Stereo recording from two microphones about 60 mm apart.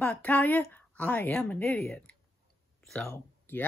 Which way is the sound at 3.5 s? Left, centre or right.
Left.